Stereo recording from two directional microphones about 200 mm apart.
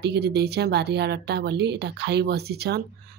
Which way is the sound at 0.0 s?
55° right (ahead or behind).